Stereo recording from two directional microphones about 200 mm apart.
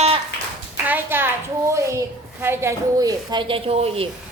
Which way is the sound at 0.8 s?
10° right (ahead or behind).